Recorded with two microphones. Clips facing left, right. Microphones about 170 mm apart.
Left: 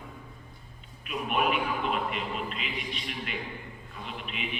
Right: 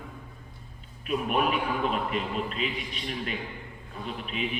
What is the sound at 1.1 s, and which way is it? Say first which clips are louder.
A man's voice: right 2 dB; 40° right (ahead or behind).